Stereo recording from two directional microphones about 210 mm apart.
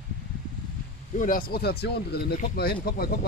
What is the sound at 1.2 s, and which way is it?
Speech, 40° left (ahead or behind).